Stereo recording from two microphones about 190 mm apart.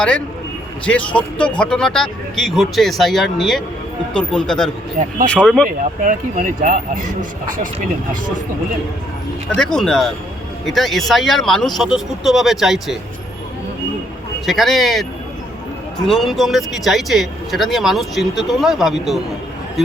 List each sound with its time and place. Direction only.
0.9 s speech: 5° left (ahead or behind)
6.1 s speech: 45° right (ahead or behind)
9.6 s speech: 5° left (ahead or behind)
14.4 s speech: centre (ahead or behind)
16.0 s speech: centre (ahead or behind)